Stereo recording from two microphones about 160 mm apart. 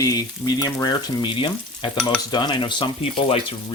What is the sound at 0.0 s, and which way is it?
Frying, 25° left (ahead or behind).